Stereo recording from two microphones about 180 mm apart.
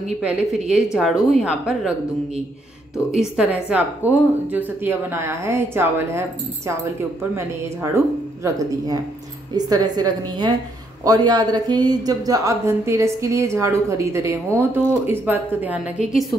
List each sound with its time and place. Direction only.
0.2 s a woman's voice: 5° right (ahead or behind)
3.1 s speech: 5° right (ahead or behind)
7.3 s speech: 15° right (ahead or behind)
9.7 s a woman's voice: 20° right (ahead or behind)